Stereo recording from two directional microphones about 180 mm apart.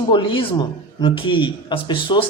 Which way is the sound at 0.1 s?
30° left (ahead or behind).